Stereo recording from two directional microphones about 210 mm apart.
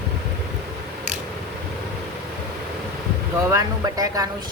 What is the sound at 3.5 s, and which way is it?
Speech, 15° right (ahead or behind).